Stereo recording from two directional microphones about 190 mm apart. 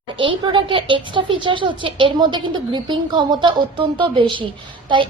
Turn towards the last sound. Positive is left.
turn(degrees=-25)  # may be behind; listen again after turning